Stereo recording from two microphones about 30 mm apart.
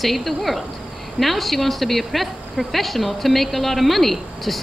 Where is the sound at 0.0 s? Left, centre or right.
Centre.